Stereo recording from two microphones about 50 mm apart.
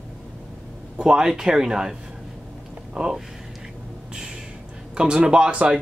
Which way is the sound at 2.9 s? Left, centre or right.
Centre.